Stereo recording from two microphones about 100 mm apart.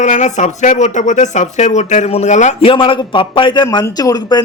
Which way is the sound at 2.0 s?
80° left.